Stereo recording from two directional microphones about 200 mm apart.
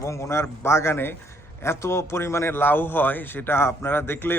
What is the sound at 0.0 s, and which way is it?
A man's voice, 15° left (ahead or behind).